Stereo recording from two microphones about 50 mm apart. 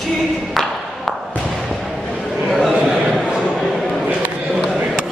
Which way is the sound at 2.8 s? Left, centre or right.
Centre.